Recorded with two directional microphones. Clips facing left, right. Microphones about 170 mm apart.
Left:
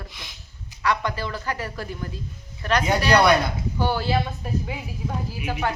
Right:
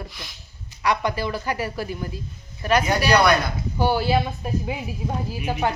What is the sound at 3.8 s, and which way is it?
Speech, 15° right (ahead or behind).